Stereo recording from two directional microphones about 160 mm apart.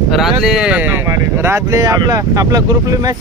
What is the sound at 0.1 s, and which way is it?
Speech, centre (ahead or behind).